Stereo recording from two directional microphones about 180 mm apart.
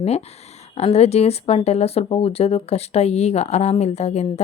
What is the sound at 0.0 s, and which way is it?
Speech, 35° left (ahead or behind).